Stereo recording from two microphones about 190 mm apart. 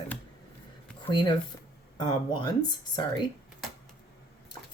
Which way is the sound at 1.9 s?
25° left (ahead or behind).